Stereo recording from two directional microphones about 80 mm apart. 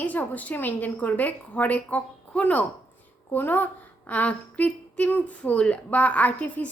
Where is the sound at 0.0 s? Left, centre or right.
Centre.